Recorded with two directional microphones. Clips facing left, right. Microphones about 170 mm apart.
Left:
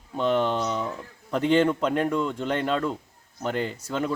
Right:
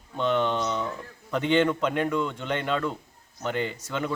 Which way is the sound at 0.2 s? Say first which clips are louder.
Left 1 dB; 35° left (ahead or behind).